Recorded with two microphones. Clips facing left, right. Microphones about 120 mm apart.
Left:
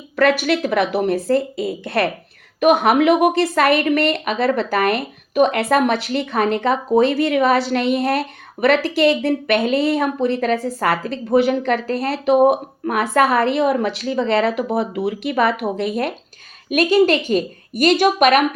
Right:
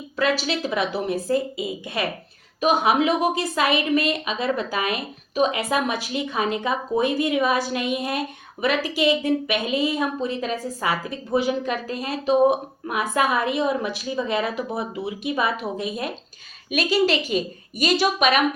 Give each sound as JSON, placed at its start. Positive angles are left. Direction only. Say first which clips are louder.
{"t": 0.2, "sound": "a woman's voice", "louder": "left 7 dB", "side_deg": 60}
{"t": 16.6, "sound": "a woman's voice", "louder": "left 6 dB", "side_deg": 55}